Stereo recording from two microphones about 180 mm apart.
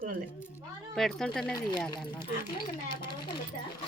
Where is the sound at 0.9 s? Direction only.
Centre (ahead or behind).